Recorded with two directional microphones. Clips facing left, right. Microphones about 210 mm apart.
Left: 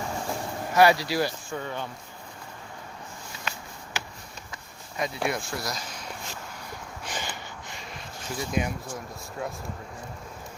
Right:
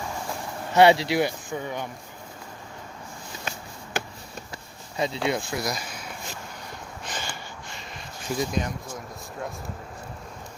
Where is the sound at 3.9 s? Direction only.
55° right (ahead or behind).